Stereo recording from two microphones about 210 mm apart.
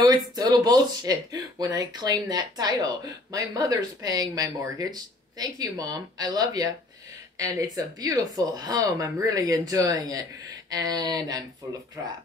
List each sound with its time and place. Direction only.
0.0 s speech: 20° right (ahead or behind)